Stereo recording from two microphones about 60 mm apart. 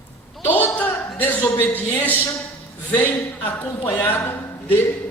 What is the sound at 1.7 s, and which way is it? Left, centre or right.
A woman's voice, left.